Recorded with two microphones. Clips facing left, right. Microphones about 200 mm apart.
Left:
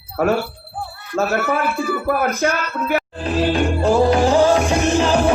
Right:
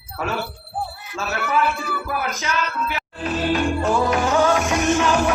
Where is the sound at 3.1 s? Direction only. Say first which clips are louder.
Left 3 dB; 30° left (ahead or behind).